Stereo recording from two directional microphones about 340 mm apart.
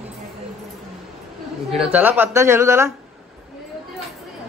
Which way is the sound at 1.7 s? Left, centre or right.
Centre.